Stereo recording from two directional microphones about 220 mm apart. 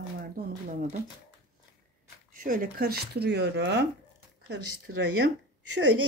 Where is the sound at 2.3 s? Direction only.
40° right (ahead or behind).